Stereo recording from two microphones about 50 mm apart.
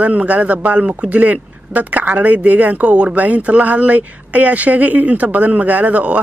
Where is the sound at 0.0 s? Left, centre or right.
Right.